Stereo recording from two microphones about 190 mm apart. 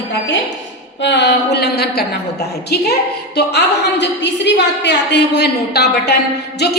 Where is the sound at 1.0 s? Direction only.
65° left (ahead or behind).